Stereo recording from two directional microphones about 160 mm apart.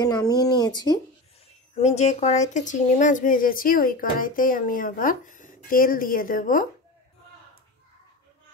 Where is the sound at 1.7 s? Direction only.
45° left (ahead or behind).